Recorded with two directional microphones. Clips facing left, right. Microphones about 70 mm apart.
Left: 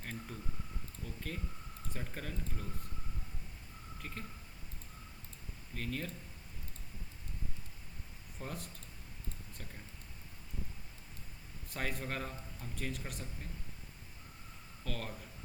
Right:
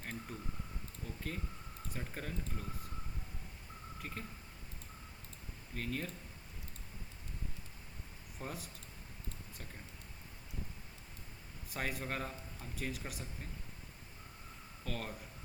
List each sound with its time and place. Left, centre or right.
0.0 s a sound: centre
1.9 s a man's voice: centre
4.0 s a man's voice: centre
5.7 s a man's voice: centre
8.4 s a man's voice: centre
11.7 s a man's voice: centre
14.8 s a man's voice: centre